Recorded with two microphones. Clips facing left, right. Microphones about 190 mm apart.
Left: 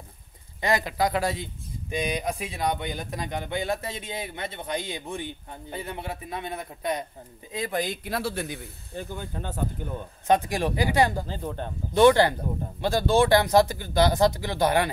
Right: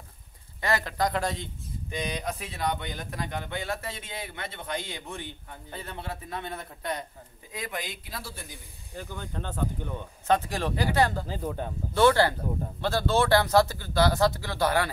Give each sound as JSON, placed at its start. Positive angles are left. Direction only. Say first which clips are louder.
{"t": 0.6, "sound": "speech", "louder": "left 3 dB", "side_deg": 15}
{"t": 7.5, "sound": "speech", "louder": "left 7 dB", "side_deg": 30}
{"t": 8.0, "sound": "speech", "louder": "left 11 dB", "side_deg": 70}
{"t": 8.9, "sound": "speech", "louder": "left 3 dB", "side_deg": 15}
{"t": 11.2, "sound": "speech", "louder": "even", "side_deg": -5}
{"t": 11.9, "sound": "speech", "louder": "left 4 dB", "side_deg": 20}